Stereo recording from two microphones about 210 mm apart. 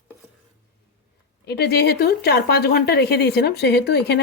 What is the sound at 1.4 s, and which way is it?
Speech, 50° left (ahead or behind).